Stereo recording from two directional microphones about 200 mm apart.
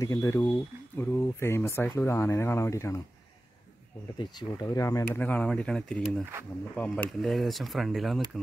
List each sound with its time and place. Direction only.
0.0 s speech: 15° left (ahead or behind)
4.2 s speech: 20° left (ahead or behind); by 8.3 s centre (ahead or behind)